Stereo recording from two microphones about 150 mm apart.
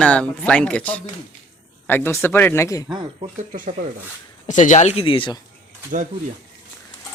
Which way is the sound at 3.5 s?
60° right (ahead or behind).